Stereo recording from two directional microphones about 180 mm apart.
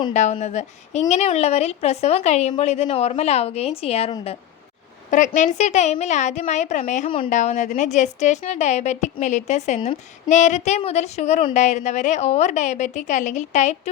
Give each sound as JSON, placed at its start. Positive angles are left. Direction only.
{"t": 0.1, "sound": "a woman's voice", "side_deg": 40}
{"t": 5.1, "sound": "a woman's voice", "side_deg": 45}